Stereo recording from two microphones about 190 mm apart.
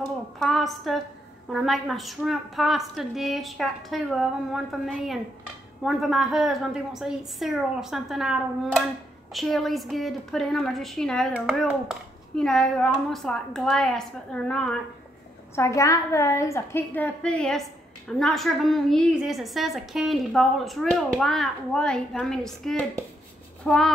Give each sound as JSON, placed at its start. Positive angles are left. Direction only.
{"t": 0.4, "sound": "a woman's voice", "side_deg": 0}
{"t": 15.5, "sound": "a woman's voice", "side_deg": 15}